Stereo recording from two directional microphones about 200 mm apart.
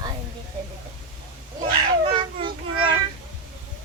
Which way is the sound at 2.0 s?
25° right (ahead or behind).